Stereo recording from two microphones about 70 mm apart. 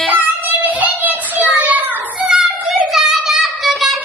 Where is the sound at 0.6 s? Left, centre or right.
Right.